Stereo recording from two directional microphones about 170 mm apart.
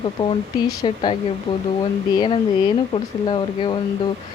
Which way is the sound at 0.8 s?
30° left (ahead or behind).